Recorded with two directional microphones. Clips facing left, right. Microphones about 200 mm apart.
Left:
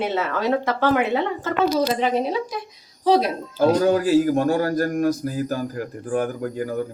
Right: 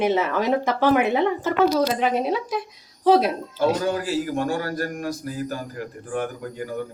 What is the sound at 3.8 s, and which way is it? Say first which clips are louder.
Speech: left 7 dB; 45° left (ahead or behind).